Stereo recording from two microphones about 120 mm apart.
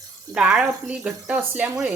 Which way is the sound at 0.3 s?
5° right (ahead or behind).